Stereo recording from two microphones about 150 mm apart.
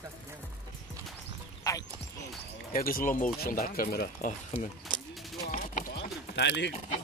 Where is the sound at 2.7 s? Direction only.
70° left (ahead or behind); by 4.3 s 85° left.